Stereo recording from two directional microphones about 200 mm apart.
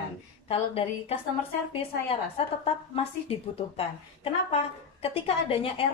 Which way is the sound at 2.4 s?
30° left (ahead or behind).